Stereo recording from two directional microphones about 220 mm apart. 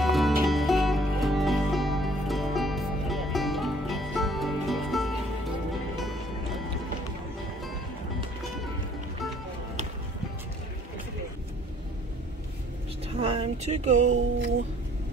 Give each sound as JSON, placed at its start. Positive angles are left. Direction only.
{"t": 0.0, "sound": "music", "side_deg": 0}
{"t": 13.1, "sound": "speech", "side_deg": -25}